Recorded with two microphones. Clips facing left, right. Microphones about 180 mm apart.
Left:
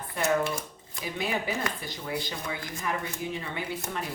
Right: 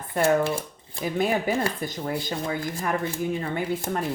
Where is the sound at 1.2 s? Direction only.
50° right (ahead or behind).